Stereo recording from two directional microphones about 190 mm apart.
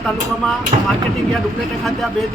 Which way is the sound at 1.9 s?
Centre (ahead or behind).